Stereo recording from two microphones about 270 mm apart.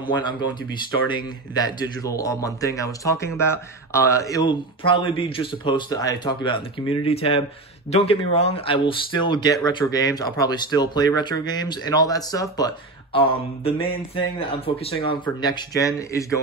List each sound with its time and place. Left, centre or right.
0.0 s speech: centre